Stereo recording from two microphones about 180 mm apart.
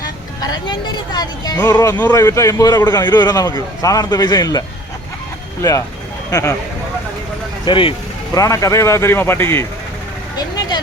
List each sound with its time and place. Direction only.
0.4 s a man's voice: 20° left (ahead or behind)
6.3 s speech: 15° left (ahead or behind)
7.6 s a man's voice: 30° left (ahead or behind)
8.4 s speech: 20° left (ahead or behind)